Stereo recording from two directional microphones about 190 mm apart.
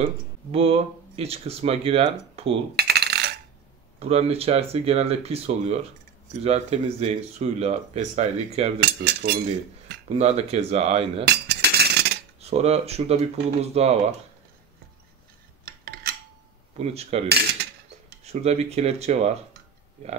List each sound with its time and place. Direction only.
0.5 s speech: 30° right (ahead or behind)
2.7 s coin: 60° right (ahead or behind)
4.0 s speech: 30° right (ahead or behind)
8.8 s cutlery: 60° right (ahead or behind)
10.0 s speech: 35° right (ahead or behind)
11.2 s a sound: 60° right (ahead or behind)
12.4 s speech: 35° right (ahead or behind)
15.6 s a sound: 50° right (ahead or behind)
16.7 s speech: 35° right (ahead or behind)
18.2 s speech: 35° right (ahead or behind)